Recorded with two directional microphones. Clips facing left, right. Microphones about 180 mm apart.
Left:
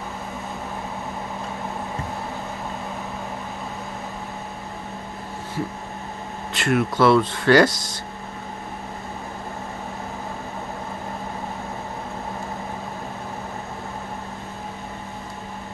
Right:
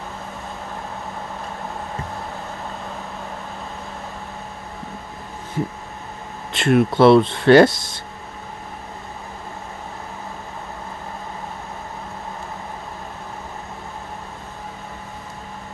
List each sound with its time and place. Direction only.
6.5 s speech: 25° right (ahead or behind)